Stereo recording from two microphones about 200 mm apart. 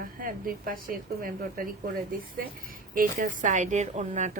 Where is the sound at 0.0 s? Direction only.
45° right (ahead or behind).